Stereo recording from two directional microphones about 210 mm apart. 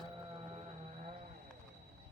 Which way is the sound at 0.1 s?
25° right (ahead or behind).